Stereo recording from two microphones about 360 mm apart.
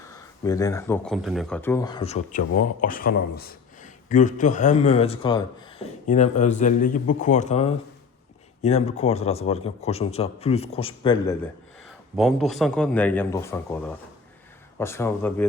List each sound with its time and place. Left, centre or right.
0.0 s a man's voice: centre
12.1 s a man's voice: centre